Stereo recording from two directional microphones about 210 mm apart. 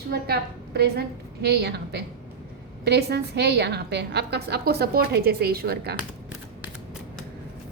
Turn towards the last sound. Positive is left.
turn(degrees=-50)  # may be behind; listen again after turning